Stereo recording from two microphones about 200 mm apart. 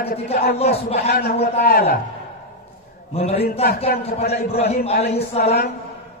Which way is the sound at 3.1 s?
30° left (ahead or behind).